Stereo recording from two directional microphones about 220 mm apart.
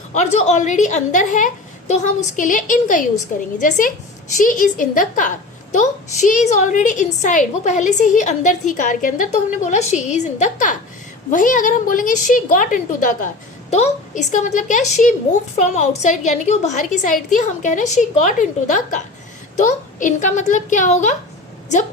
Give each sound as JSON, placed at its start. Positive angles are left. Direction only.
{"t": 0.1, "sound": "a woman's voice", "side_deg": 30}